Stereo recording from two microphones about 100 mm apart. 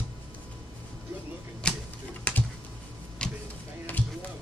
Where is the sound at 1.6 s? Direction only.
10° left (ahead or behind).